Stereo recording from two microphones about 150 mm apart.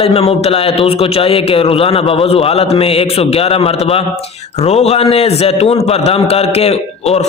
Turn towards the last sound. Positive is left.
turn(degrees=45)  # may be behind; listen again after turning